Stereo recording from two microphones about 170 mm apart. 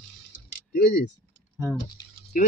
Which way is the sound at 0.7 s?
70° left (ahead or behind).